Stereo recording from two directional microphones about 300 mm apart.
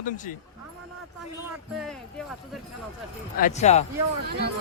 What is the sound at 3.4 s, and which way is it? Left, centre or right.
Speech, left.